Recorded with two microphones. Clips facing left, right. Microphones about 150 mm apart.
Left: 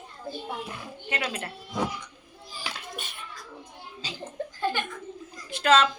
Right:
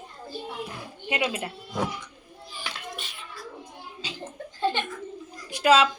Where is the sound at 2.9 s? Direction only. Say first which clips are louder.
Even; 50° left (ahead or behind).